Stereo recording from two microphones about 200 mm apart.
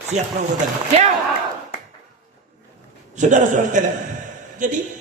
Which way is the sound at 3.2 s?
40° right (ahead or behind).